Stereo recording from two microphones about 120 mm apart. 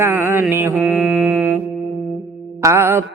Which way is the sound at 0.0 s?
20° right (ahead or behind).